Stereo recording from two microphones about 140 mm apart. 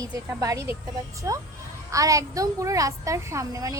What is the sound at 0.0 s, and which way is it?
A child's voice, 25° right (ahead or behind).